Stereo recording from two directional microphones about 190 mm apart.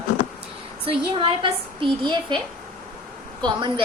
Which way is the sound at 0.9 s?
30° right (ahead or behind).